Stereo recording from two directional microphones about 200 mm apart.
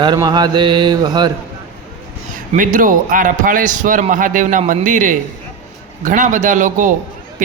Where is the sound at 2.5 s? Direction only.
40° right (ahead or behind).